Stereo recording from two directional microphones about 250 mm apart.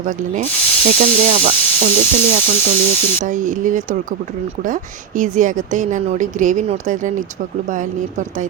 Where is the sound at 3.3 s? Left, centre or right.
Right.